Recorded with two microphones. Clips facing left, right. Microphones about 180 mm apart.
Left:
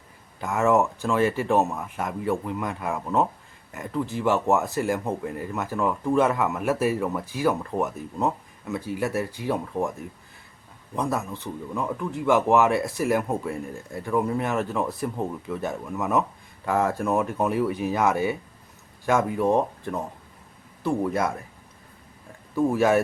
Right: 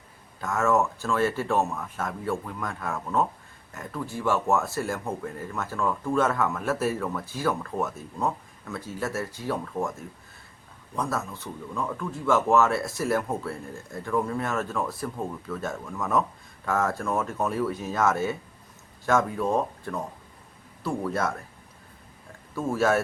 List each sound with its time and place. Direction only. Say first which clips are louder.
0.4 s speech: left 3 dB; 15° left (ahead or behind)
10.9 s speech: left 3 dB; 15° left (ahead or behind)
22.5 s speech: left 4 dB; 15° left (ahead or behind)